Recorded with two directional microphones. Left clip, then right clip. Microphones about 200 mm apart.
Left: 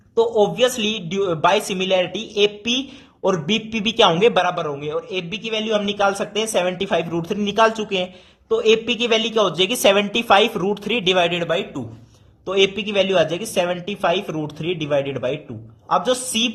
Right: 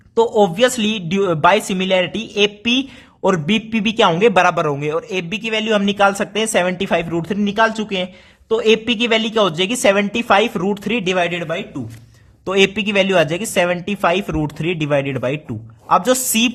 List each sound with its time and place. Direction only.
0.2 s a man's voice: 25° right (ahead or behind)
4.4 s a man's voice: 40° right (ahead or behind); by 11.8 s 20° right (ahead or behind)
12.5 s speech: 35° right (ahead or behind)